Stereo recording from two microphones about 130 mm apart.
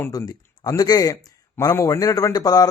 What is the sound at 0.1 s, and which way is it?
A man's voice, 30° left (ahead or behind).